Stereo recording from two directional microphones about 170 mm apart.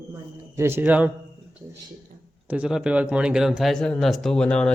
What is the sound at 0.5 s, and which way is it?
Speech, 15° right (ahead or behind).